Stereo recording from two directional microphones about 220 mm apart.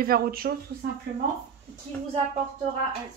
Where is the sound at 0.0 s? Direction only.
45° right (ahead or behind).